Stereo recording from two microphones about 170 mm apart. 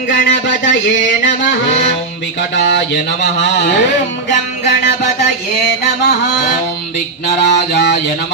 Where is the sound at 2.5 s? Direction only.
90° left.